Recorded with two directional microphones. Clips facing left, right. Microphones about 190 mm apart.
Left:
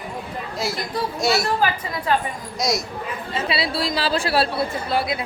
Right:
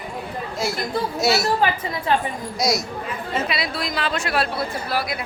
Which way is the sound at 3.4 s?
30° left (ahead or behind).